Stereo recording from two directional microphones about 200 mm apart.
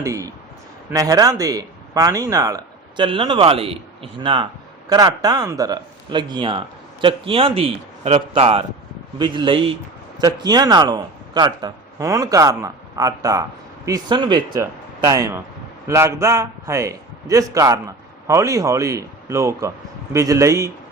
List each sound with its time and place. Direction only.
0.0 s a man's voice: 15° right (ahead or behind)